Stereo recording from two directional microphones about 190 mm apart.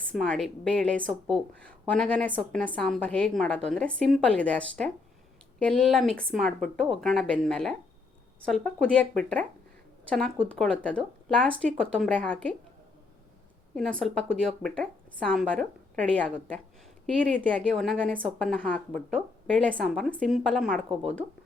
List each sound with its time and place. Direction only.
0.1 s a woman's voice: 5° left (ahead or behind)
13.7 s a woman's voice: 5° left (ahead or behind)